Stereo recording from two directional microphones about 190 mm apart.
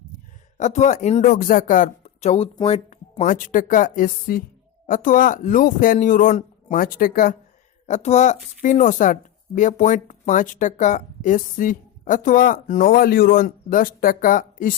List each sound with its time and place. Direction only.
0.5 s speech: 40° left (ahead or behind)